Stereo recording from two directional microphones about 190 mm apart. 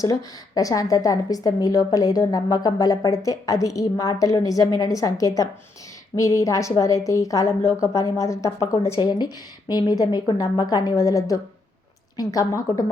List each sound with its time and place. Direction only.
0.0 s a woman's voice: 20° left (ahead or behind)